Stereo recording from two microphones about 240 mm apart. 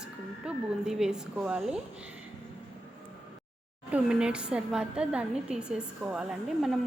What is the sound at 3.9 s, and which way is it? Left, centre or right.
A woman's voice, centre.